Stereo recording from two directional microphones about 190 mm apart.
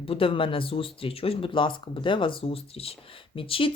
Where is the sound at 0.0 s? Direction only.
30° left (ahead or behind).